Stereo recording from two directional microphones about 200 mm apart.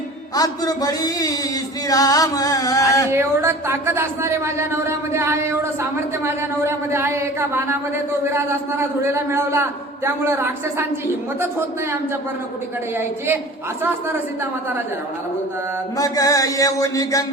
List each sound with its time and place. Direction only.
0.3 s speech: 20° left (ahead or behind)
1.9 s music: 15° left (ahead or behind)
3.1 s a man's voice: 15° right (ahead or behind)
16.0 s music: 15° left (ahead or behind)